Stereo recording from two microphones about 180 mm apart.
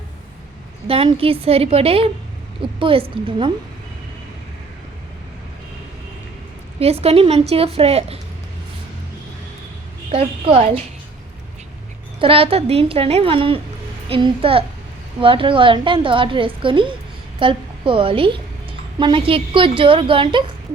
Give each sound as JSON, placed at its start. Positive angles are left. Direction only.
{"t": 0.9, "sound": "a woman's voice", "side_deg": -30}
{"t": 6.7, "sound": "a woman's voice", "side_deg": -35}
{"t": 10.1, "sound": "a woman's voice", "side_deg": -30}
{"t": 12.2, "sound": "a woman's voice", "side_deg": -30}